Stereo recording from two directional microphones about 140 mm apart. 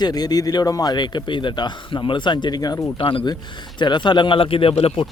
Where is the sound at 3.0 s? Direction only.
35° left (ahead or behind).